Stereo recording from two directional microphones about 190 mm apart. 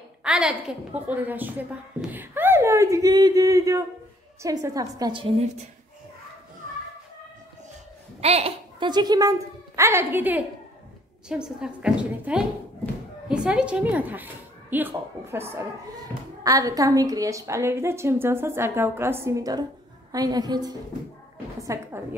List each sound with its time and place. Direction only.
0.2 s a woman's voice: 5° right (ahead or behind); by 5.5 s 30° right (ahead or behind)
8.2 s a woman's voice: 35° right (ahead or behind); by 22.0 s 15° right (ahead or behind)